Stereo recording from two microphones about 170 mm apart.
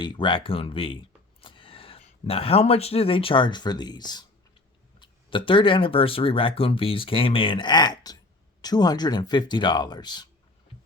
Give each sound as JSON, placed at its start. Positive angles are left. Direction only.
{"t": 0.0, "sound": "speech", "side_deg": 25}
{"t": 5.5, "sound": "speech", "side_deg": 30}